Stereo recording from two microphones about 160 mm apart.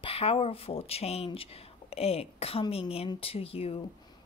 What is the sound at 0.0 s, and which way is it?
A woman's voice, 35° left (ahead or behind).